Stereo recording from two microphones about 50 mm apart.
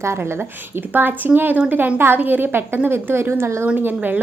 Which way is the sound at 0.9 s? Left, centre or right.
Right.